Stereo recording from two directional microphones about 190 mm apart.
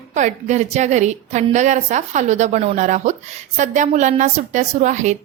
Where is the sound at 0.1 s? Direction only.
40° right (ahead or behind).